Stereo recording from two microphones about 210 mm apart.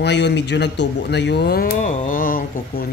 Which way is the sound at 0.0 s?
55° left (ahead or behind).